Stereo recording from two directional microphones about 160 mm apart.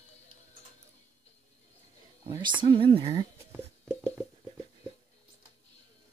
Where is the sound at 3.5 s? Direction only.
10° right (ahead or behind).